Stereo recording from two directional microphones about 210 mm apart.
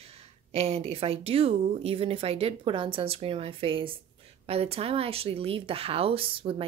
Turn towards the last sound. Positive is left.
turn(degrees=-25)  # may be behind; listen again after turning